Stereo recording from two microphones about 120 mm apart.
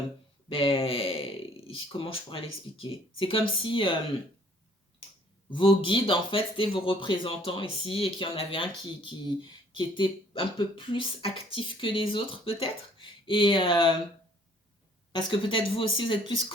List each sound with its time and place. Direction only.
0.4 s speech: 50° left (ahead or behind)
5.5 s speech: 45° left (ahead or behind)
15.1 s speech: 45° left (ahead or behind)